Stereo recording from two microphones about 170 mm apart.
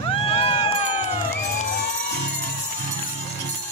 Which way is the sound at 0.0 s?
35° left (ahead or behind).